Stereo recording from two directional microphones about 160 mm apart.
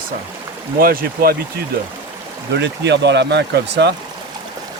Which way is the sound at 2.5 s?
90° right.